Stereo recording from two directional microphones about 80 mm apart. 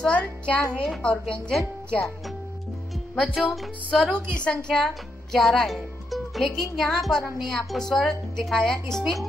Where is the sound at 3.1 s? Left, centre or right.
Centre.